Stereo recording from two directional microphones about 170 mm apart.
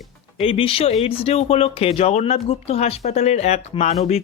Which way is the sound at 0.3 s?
30° left (ahead or behind).